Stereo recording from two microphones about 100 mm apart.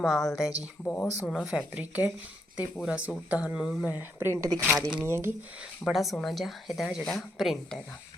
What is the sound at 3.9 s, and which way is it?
Speech, 20° right (ahead or behind).